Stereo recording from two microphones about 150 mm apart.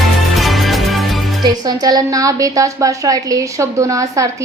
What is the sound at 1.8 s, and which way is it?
A woman's voice, 25° right (ahead or behind).